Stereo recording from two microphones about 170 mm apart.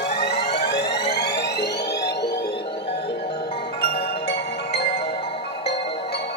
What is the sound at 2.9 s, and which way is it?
Music, 75° left (ahead or behind).